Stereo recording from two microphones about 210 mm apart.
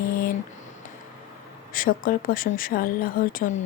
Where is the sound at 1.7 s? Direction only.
40° left (ahead or behind).